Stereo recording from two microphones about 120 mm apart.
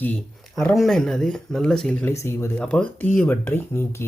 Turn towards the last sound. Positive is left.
turn(degrees=20)  # may be behind; listen again after turning